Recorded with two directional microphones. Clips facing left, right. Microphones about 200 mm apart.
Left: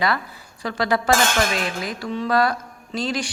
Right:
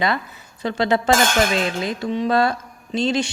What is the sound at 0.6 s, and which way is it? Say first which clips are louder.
A woman's voice: right 3 dB; 25° right (ahead or behind).